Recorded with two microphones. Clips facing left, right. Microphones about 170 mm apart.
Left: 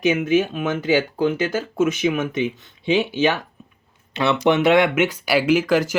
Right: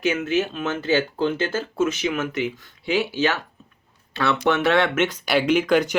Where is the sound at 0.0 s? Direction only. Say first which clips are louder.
Left 4 dB; 15° left (ahead or behind).